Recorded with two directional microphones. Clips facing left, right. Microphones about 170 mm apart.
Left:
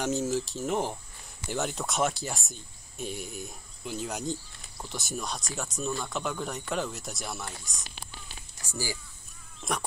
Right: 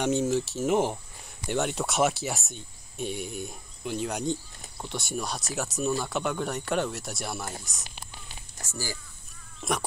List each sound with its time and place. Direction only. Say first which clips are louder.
0.0 s speech: right 3 dB; centre (ahead or behind)
8.6 s speech: left 1 dB; 15° left (ahead or behind)
9.6 s a sound: right 3 dB; centre (ahead or behind)